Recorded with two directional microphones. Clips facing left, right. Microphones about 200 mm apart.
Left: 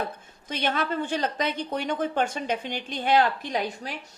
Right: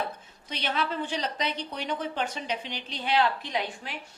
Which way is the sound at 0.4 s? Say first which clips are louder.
Left 3 dB; 50° left (ahead or behind).